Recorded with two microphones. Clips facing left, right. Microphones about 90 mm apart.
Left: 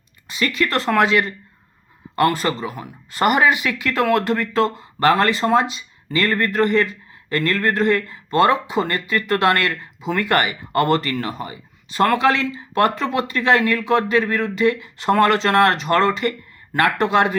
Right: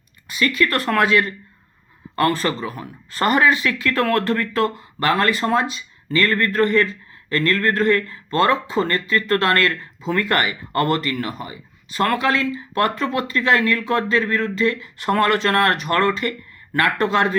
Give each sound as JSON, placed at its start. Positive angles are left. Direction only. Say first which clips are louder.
{"t": 0.3, "sound": "speech", "louder": "right 1 dB", "side_deg": 25}